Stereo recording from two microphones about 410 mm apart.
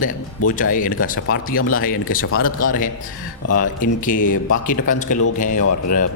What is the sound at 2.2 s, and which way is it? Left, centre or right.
Speech, left.